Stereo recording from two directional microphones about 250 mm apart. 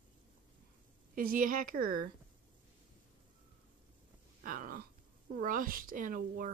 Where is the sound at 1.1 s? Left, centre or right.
Right.